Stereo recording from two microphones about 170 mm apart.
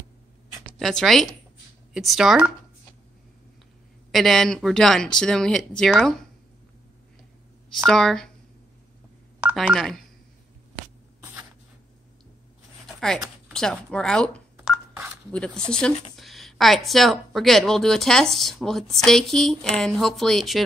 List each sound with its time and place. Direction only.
0.7 s a woman's voice: centre (ahead or behind)
4.1 s a woman's voice: centre (ahead or behind)
7.7 s a woman's voice: centre (ahead or behind)
9.4 s speech: 5° right (ahead or behind)
12.8 s a sound: centre (ahead or behind)
15.3 s a woman's voice: 5° left (ahead or behind)